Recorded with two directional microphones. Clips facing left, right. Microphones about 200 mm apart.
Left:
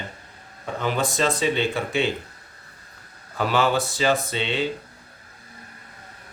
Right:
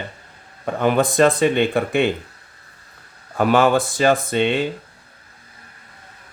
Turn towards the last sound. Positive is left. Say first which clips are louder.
# right 6 dB
turn(degrees=-50)  # may be behind; listen again after turning